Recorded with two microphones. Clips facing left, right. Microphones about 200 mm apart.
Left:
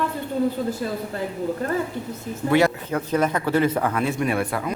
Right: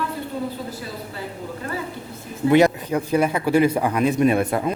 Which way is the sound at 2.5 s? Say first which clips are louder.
Right 3 dB; 20° right (ahead or behind).